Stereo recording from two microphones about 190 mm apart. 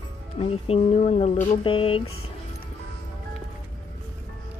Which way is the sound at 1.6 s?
30° left (ahead or behind).